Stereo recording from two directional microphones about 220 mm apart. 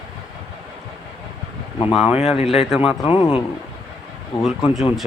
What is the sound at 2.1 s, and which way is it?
Speech, 5° right (ahead or behind).